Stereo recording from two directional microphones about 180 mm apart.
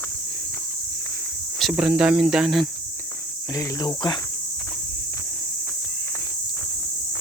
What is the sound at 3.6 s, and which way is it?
Cricket, 25° left (ahead or behind).